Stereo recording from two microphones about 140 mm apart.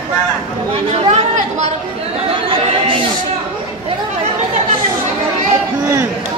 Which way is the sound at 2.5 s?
40° right (ahead or behind).